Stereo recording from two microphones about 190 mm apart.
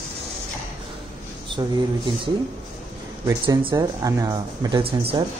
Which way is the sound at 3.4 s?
25° right (ahead or behind).